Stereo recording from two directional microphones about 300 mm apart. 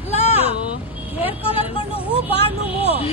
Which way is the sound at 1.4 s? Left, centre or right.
Centre.